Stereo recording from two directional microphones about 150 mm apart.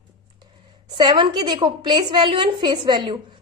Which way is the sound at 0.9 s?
30° right (ahead or behind).